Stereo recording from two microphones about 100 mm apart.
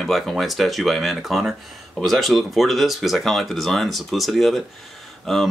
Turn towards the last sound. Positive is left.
turn(degrees=0)  # may be behind; listen again after turning